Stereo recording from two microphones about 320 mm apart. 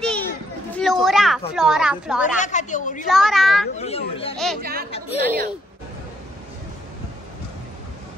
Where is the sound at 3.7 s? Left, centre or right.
Centre.